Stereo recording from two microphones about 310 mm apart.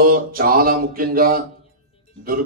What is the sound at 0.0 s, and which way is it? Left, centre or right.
Speech, right.